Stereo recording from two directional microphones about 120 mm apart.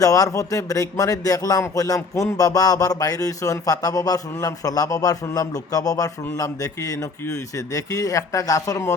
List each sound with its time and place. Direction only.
0.0 s speech: 30° left (ahead or behind)